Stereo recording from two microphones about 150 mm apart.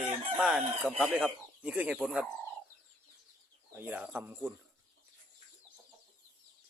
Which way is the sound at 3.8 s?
10° right (ahead or behind).